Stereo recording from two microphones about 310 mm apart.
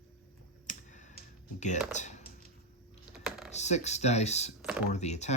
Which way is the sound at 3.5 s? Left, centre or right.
Left.